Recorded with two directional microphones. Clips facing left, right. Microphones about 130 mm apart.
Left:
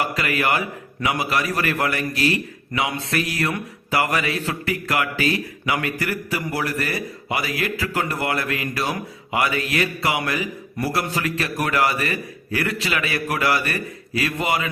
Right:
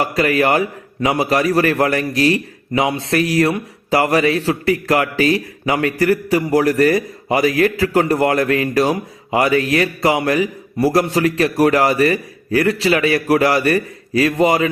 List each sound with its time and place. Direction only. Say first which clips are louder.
0.0 s a man's voice: right 7 dB; 40° right (ahead or behind)